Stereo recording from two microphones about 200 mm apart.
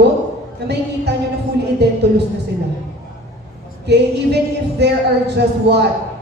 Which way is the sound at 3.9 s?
55° right (ahead or behind).